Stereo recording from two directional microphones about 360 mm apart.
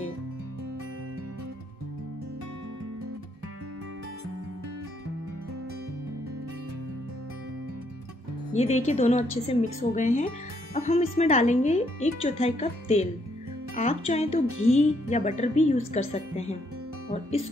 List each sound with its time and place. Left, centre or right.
8.5 s a woman's voice: centre